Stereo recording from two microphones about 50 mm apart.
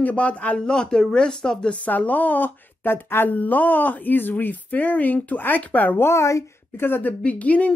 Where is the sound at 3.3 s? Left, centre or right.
Left.